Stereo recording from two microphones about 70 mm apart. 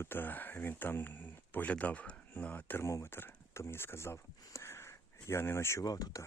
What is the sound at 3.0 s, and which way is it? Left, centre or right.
Speech, left.